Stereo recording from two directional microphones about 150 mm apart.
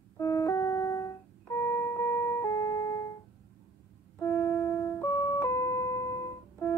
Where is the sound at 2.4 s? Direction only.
20° left (ahead or behind).